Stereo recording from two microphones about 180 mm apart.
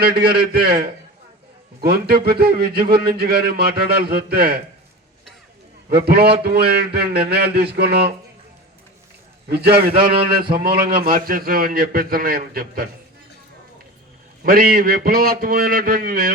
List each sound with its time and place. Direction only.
0.0 s a man's voice: 55° right (ahead or behind)
2.2 s a man's voice: 60° right (ahead or behind)
5.9 s a man's voice: 55° right (ahead or behind)
9.5 s a man's voice: 60° right (ahead or behind)
14.4 s a man's voice: 55° right (ahead or behind)